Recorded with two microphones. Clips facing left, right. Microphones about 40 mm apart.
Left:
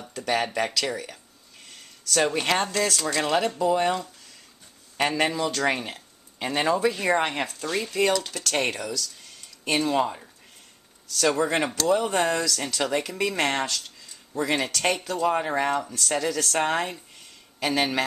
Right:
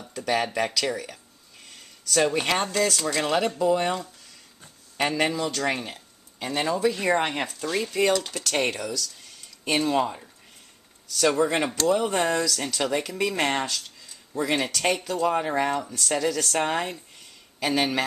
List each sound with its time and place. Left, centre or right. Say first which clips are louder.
0.1 s speech: even; centre
1.7 s a sound: left 1 dB; centre
2.3 s speech: even; centre
7.0 s speech: even; centre